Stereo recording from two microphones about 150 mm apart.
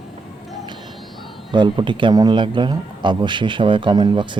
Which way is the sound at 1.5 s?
30° right (ahead or behind).